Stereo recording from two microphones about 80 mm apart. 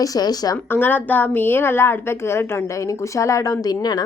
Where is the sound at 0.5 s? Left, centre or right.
Left.